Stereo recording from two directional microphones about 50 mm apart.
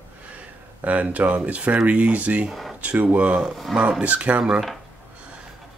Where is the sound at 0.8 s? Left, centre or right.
Right.